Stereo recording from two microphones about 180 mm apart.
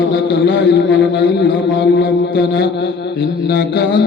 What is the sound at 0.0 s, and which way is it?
A man's voice, 85° left.